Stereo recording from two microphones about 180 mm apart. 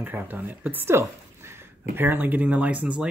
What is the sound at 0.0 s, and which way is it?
Speech, 10° right (ahead or behind).